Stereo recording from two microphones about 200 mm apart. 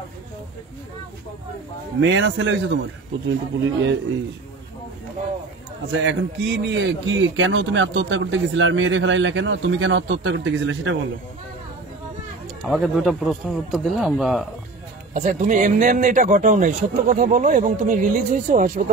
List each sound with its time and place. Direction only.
2.0 s a man's voice: 65° right (ahead or behind)
5.9 s a man's voice: 65° right (ahead or behind)
12.6 s a man's voice: centre (ahead or behind)
15.1 s speech: 35° right (ahead or behind)